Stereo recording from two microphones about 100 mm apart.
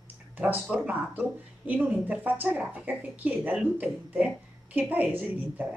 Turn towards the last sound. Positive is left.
turn(degrees=-15)  # may be behind; listen again after turning